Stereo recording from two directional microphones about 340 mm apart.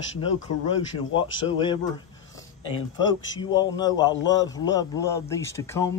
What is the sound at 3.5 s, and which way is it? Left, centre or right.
Speech, centre.